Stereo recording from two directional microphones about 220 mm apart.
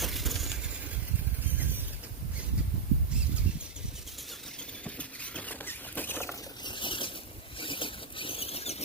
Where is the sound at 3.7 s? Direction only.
Centre (ahead or behind).